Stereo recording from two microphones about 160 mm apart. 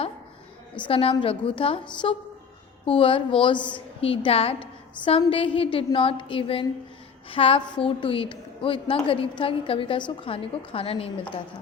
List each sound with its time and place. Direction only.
0.8 s a woman's voice: 35° left (ahead or behind)